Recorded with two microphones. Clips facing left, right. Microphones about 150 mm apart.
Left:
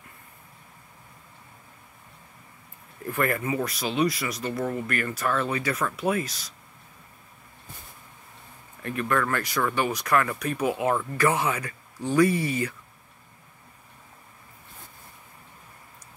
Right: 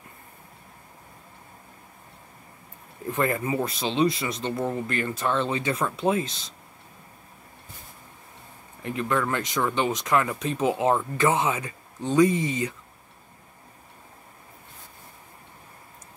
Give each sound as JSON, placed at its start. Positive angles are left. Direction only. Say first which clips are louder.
{"t": 3.1, "sound": "speech", "louder": "right 1 dB", "side_deg": -20}
{"t": 8.8, "sound": "speech", "louder": "even", "side_deg": -20}